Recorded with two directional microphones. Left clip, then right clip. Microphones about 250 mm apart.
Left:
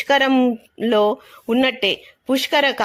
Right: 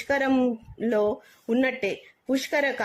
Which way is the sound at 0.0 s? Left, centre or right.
Centre.